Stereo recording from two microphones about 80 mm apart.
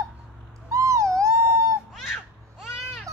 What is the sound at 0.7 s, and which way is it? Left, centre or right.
Owl, right.